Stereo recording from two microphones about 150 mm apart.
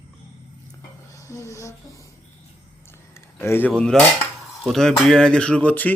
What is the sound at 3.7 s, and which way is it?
Speech, 5° left (ahead or behind).